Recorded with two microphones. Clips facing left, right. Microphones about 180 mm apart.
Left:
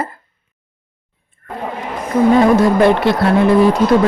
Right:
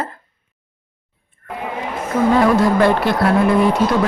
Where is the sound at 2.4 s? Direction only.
20° left (ahead or behind).